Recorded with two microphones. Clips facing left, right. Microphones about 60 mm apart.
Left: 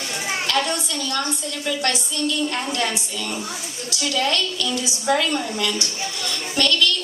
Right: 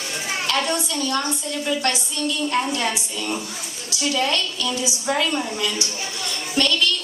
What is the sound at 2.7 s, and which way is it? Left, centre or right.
Speech, right.